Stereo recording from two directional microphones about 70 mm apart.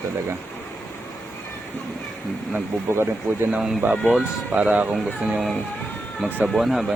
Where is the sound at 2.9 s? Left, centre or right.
Right.